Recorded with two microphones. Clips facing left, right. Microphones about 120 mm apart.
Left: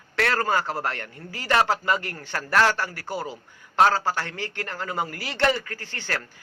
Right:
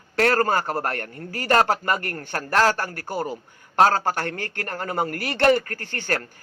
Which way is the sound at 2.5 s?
40° right (ahead or behind).